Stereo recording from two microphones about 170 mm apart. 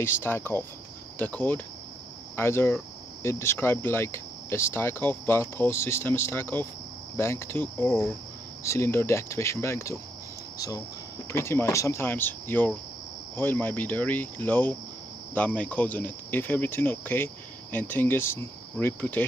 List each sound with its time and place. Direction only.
0.0 s speech: 15° left (ahead or behind)
11.3 s speech: 15° left (ahead or behind)